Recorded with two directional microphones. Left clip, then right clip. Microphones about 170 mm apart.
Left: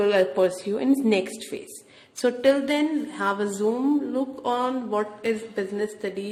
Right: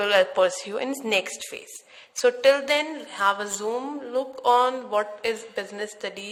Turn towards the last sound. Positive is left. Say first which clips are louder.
# left 3 dB
turn(degrees=-30)  # may be behind; listen again after turning